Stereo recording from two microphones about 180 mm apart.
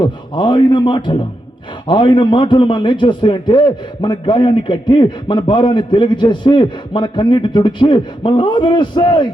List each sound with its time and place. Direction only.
0.0 s a man's voice: 25° left (ahead or behind)